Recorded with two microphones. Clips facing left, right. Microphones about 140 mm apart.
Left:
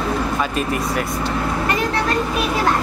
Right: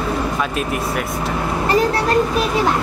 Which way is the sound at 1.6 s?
35° right (ahead or behind).